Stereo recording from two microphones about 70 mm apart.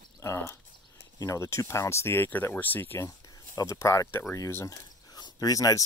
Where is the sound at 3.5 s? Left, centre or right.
Left.